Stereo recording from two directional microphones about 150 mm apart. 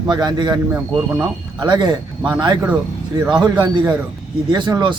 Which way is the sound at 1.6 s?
30° right (ahead or behind).